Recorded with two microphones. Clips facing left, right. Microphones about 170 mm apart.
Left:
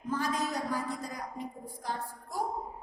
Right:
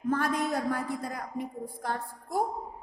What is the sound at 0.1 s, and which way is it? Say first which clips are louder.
A woman's voice: right 4 dB; 55° right (ahead or behind).